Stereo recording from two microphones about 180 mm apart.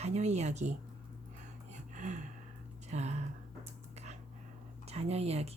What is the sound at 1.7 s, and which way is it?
Gasp, 40° right (ahead or behind).